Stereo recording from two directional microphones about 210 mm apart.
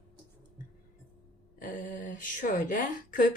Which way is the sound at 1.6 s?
40° left (ahead or behind).